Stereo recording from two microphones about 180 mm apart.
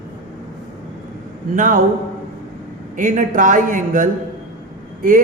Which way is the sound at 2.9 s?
45° right (ahead or behind).